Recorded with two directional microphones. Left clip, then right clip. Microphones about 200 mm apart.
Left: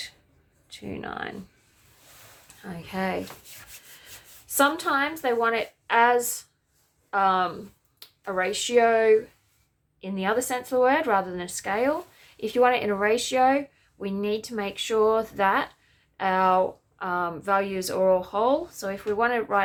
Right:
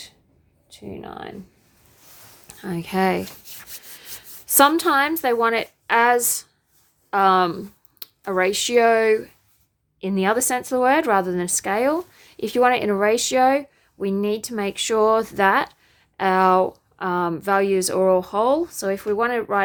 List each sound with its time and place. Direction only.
0.7 s speech: 10° right (ahead or behind)
2.6 s a woman's voice: 60° right (ahead or behind); by 19.6 s 40° right (ahead or behind)